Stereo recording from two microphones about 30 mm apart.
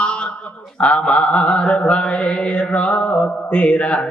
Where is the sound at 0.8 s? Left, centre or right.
Left.